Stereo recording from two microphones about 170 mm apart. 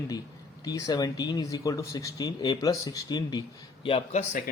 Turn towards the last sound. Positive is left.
turn(degrees=40)  # may be behind; listen again after turning